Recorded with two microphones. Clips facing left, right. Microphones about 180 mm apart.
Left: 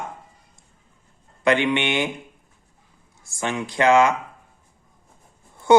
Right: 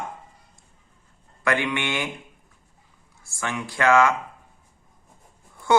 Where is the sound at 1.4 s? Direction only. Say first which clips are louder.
Left 5 dB; 20° left (ahead or behind).